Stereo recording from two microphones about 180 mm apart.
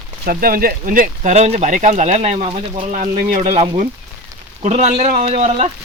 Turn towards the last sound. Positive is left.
turn(degrees=-40)  # may be behind; listen again after turning